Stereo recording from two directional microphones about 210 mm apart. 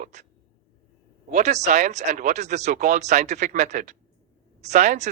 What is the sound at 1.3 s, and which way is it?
Speech, 35° right (ahead or behind).